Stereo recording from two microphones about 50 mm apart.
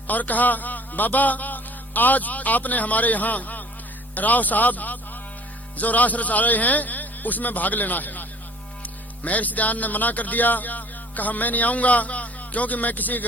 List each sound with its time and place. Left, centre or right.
0.1 s a man's voice: left